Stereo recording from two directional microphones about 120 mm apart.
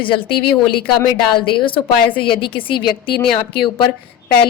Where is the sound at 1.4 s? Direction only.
45° left (ahead or behind).